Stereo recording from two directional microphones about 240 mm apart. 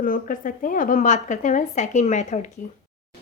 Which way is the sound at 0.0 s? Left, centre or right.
Left.